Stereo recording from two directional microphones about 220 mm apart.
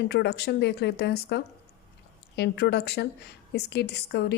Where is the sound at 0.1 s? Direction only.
50° left (ahead or behind).